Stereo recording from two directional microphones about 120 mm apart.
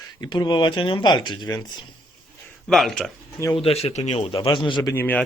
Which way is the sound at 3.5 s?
55° left (ahead or behind).